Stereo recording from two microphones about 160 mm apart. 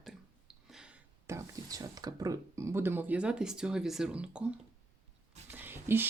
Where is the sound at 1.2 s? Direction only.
20° right (ahead or behind).